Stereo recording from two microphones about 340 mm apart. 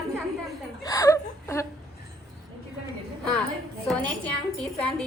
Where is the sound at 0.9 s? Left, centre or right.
Centre.